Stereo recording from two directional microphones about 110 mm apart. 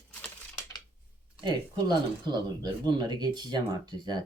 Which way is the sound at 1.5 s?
45° right (ahead or behind).